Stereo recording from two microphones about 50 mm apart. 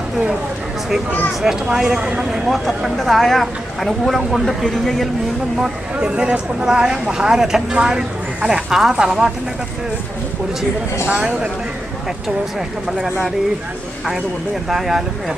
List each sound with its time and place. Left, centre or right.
1.4 s a woman's voice: centre
2.5 s speech: centre
5.5 s a woman's voice: centre
11.0 s speech: right
14.7 s a woman's voice: centre